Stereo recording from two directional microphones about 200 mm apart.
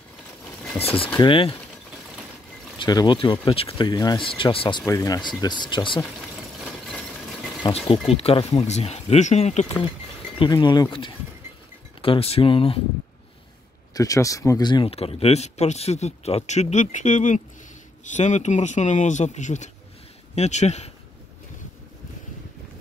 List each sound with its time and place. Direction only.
0.7 s speech: 30° left (ahead or behind)
2.8 s speech: 20° left (ahead or behind)
7.9 s speech: 30° left (ahead or behind)
10.4 s speech: 20° left (ahead or behind)
13.9 s speech: 15° left (ahead or behind); by 20.9 s 35° left (ahead or behind)